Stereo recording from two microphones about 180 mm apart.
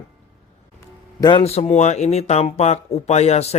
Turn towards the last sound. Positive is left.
turn(degrees=35)  # may be behind; listen again after turning